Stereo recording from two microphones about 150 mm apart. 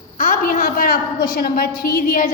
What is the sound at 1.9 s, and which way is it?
Speech, 65° left (ahead or behind).